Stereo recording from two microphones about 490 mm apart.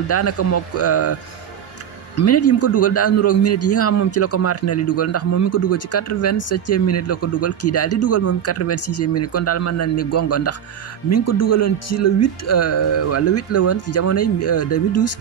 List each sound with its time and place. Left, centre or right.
0.1 s a man's voice: left
2.1 s a man's voice: left